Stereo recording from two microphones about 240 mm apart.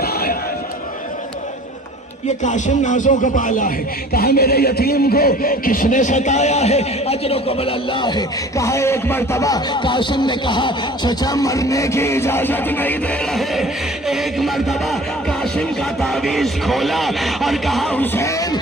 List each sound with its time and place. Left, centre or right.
0.0 s a sound: left
2.4 s speech: left; by 13.7 s centre
14.1 s music: centre